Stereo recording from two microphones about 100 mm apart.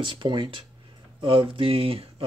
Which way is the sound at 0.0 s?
60° right (ahead or behind).